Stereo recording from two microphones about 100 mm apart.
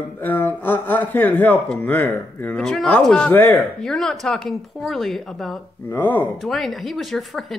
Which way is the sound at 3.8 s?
5° left (ahead or behind).